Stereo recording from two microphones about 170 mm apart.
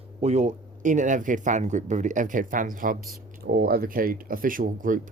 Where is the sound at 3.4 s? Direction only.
65° right (ahead or behind).